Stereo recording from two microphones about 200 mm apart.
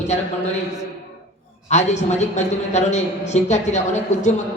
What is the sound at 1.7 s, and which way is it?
A man's voice, 35° left (ahead or behind).